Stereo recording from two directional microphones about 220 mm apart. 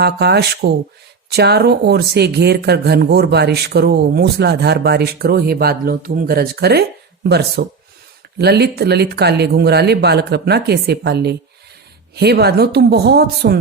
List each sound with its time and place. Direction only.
0.0 s speech: 50° right (ahead or behind)